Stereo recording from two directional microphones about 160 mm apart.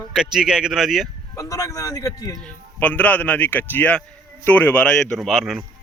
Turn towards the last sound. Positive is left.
turn(degrees=0)  # may be behind; listen again after turning